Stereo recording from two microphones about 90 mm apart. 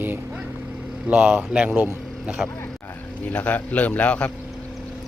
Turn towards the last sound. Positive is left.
turn(degrees=15)  # may be behind; listen again after turning